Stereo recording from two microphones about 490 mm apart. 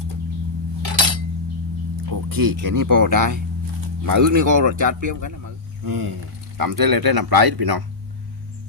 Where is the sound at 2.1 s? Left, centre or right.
Right.